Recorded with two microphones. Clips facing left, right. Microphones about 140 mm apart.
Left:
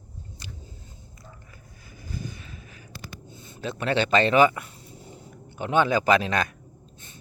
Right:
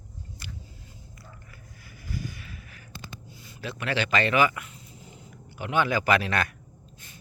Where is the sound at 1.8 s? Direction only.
25° left (ahead or behind).